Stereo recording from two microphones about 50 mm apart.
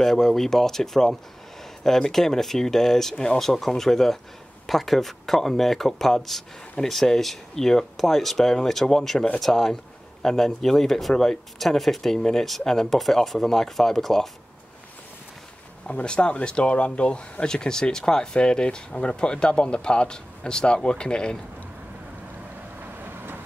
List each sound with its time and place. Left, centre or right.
0.0 s speech: centre
15.9 s speech: left
22.8 s vehicle: right